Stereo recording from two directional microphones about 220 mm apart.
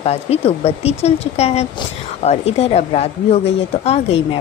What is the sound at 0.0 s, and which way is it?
Speech, 30° left (ahead or behind).